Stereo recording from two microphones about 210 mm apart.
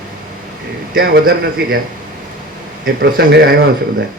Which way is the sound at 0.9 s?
45° right (ahead or behind).